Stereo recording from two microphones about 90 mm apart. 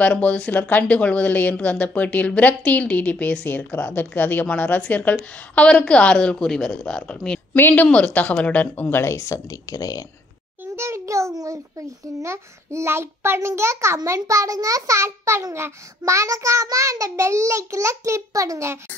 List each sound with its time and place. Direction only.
0.0 s a woman's voice: 15° left (ahead or behind)
7.5 s a woman's voice: 20° left (ahead or behind); by 10.0 s 40° left (ahead or behind)
10.6 s a sound: 30° right (ahead or behind)
12.2 s a child's voice: 30° right (ahead or behind)